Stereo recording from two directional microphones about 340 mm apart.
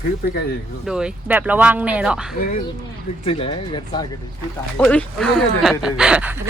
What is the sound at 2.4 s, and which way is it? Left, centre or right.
Speech, left.